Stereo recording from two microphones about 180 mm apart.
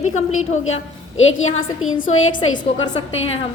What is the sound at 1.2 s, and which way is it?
Speech, 90° left.